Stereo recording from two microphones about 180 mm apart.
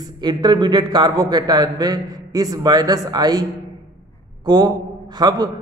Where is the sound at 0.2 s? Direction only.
25° right (ahead or behind).